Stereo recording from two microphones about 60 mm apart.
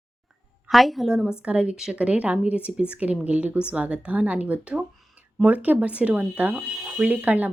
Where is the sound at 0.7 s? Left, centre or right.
Centre.